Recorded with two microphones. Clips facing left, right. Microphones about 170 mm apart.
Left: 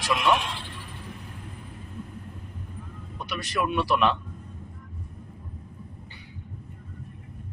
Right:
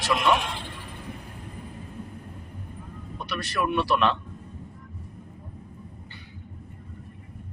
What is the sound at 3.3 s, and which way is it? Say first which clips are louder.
Speech: right 1 dB; 15° left (ahead or behind).